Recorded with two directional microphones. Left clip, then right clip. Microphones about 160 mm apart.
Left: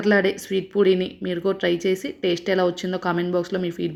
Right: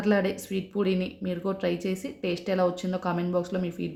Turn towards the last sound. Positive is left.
turn(degrees=20)  # may be behind; listen again after turning